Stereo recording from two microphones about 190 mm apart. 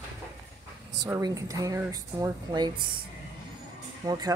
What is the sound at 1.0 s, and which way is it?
Speech, 15° right (ahead or behind).